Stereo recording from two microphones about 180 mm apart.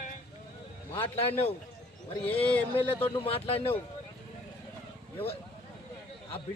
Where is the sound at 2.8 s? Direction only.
30° left (ahead or behind).